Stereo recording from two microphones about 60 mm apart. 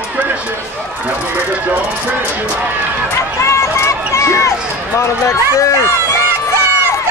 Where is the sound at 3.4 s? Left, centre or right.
Left.